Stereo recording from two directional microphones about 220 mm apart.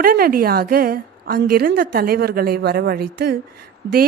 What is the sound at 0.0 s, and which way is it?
A woman's voice, 40° right (ahead or behind).